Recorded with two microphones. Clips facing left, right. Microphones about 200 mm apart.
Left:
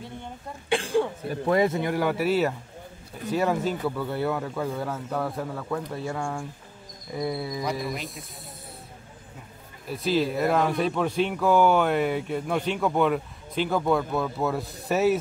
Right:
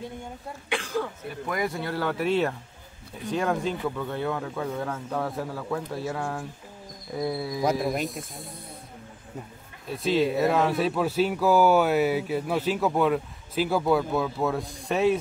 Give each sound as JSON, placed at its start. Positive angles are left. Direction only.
{"t": 0.7, "sound": "speech", "side_deg": 30}
{"t": 9.8, "sound": "speech", "side_deg": 0}